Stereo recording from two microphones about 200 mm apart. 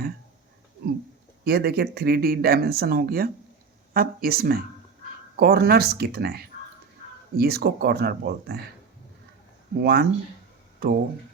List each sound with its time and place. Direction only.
1.5 s speech: 55° right (ahead or behind)
9.8 s speech: 55° right (ahead or behind)